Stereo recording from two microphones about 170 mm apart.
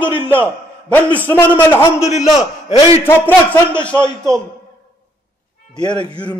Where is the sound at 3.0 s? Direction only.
10° left (ahead or behind).